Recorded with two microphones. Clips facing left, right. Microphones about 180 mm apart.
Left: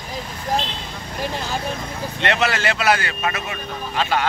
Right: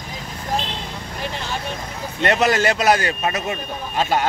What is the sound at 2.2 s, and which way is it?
Speech, 40° right (ahead or behind).